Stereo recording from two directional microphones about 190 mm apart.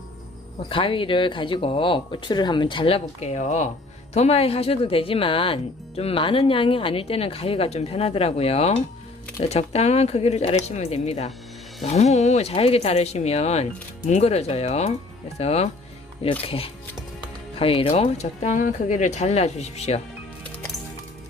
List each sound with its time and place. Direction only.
0.7 s speech: 25° left (ahead or behind)